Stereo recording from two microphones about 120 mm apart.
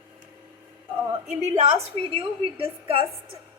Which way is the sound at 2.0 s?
50° right (ahead or behind).